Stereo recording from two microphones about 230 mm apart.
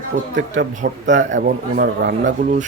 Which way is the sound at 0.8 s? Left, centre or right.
Right.